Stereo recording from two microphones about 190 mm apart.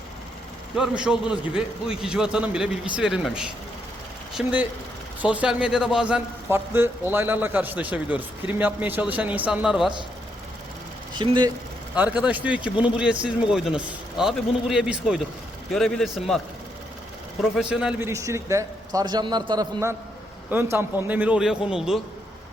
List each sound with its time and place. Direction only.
0.8 s a man's voice: 5° right (ahead or behind)
11.1 s speech: 25° right (ahead or behind)
11.9 s a man's voice: 5° right (ahead or behind)
17.5 s a man's voice: 5° right (ahead or behind)
18.1 s a man's voice: 15° right (ahead or behind)